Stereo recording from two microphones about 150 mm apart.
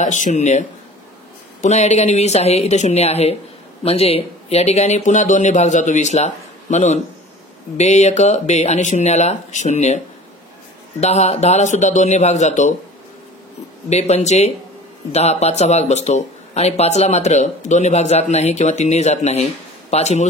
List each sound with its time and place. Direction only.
0.0 s speech: 55° left (ahead or behind)
13.8 s speech: 50° left (ahead or behind)